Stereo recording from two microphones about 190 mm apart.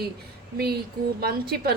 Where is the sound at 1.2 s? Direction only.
55° right (ahead or behind).